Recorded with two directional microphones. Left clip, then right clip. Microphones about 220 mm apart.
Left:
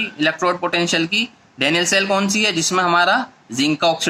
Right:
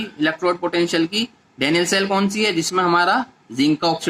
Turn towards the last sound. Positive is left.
turn(degrees=20)  # may be behind; listen again after turning